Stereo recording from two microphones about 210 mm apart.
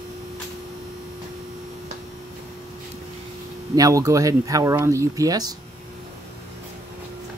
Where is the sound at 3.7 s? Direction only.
15° right (ahead or behind).